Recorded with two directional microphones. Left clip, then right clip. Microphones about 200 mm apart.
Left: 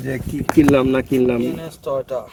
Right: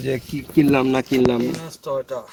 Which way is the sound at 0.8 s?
15° right (ahead or behind).